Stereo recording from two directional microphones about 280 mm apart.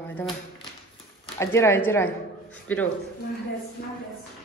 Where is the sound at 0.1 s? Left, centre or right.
Centre.